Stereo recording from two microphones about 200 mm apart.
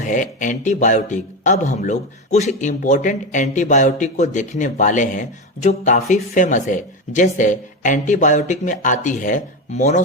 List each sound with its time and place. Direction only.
0.0 s speech: 40° left (ahead or behind)